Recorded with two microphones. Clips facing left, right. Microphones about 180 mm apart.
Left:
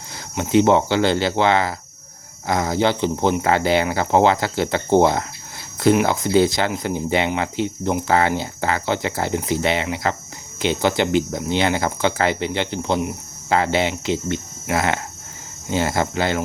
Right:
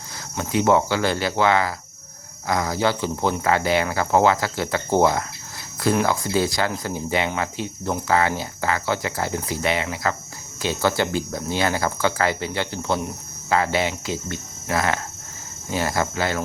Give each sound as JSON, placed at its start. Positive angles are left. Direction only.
{"t": 0.3, "sound": "speech", "side_deg": 25}